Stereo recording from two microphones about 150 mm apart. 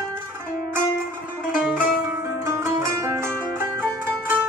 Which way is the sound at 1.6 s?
10° right (ahead or behind).